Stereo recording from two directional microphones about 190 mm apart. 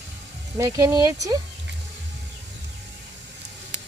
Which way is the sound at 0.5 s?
15° right (ahead or behind).